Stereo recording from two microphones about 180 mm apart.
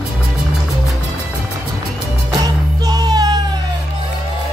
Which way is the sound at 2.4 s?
20° right (ahead or behind).